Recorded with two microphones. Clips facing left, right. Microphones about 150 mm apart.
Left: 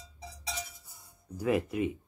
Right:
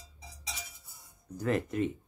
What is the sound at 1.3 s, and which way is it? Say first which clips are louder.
Speech: left 1 dB; 10° left (ahead or behind).